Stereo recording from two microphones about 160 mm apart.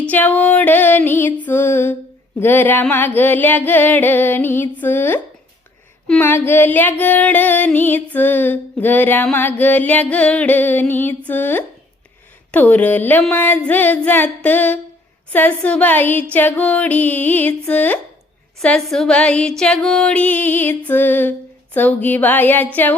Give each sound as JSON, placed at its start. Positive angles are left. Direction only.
{"t": 0.1, "sound": "music", "side_deg": 10}